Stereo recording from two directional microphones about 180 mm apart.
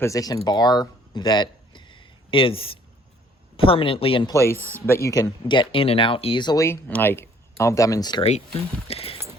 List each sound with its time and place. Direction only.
0.0 s speech: 20° left (ahead or behind)
4.4 s speech: 15° left (ahead or behind)
8.2 s speech: 35° left (ahead or behind)